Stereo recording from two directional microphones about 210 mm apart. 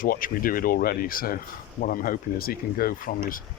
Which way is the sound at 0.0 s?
40° left (ahead or behind).